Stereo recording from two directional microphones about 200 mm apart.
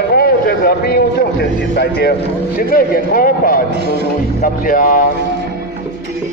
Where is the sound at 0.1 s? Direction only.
50° left (ahead or behind).